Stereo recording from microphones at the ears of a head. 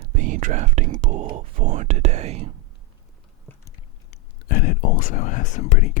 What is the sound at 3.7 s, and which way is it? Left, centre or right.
Speech, left.